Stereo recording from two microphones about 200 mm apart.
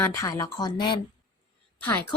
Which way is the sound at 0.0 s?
15° left (ahead or behind).